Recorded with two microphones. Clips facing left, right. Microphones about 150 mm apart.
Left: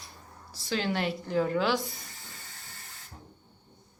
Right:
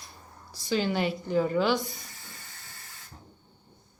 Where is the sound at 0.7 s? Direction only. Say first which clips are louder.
Right 3 dB; centre (ahead or behind).